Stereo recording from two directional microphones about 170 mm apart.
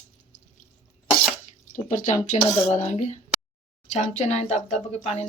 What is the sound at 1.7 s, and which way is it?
Speech, 45° left (ahead or behind).